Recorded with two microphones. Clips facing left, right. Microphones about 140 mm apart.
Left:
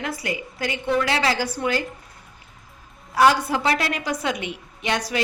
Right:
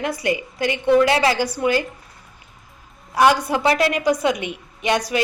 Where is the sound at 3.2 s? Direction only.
20° right (ahead or behind).